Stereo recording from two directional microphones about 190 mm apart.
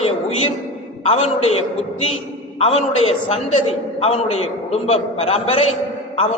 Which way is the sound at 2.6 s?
30° left (ahead or behind).